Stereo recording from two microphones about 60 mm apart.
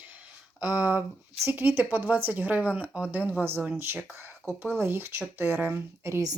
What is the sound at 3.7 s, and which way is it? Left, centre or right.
Speech, right.